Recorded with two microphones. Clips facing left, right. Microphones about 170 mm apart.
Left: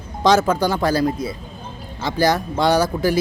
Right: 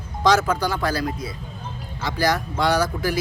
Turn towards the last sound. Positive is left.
turn(degrees=25)  # may be behind; listen again after turning